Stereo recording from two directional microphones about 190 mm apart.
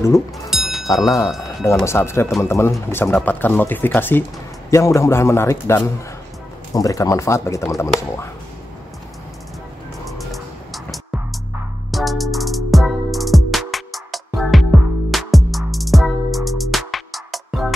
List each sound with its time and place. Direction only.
0.5 s music: centre (ahead or behind)
1.9 s speech: 15° left (ahead or behind)
10.0 s music: centre (ahead or behind)